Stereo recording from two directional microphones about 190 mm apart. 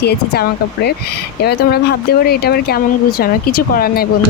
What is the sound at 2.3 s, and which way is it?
Speech, 55° left (ahead or behind).